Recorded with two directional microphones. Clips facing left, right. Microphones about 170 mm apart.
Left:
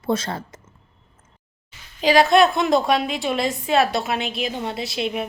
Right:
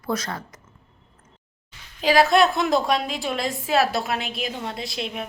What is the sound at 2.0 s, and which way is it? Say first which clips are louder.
A woman's voice: left 2 dB; centre (ahead or behind).